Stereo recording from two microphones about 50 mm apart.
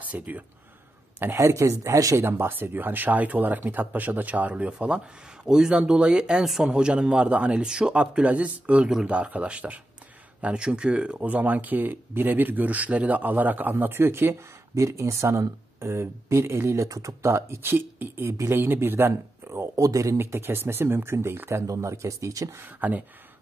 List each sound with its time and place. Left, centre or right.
0.0 s speech: right
1.4 s speech: right
2.2 s a man's voice: right
14.8 s speech: right
19.8 s speech: right
20.3 s speech: right
21.5 s speech: right
22.6 s speech: right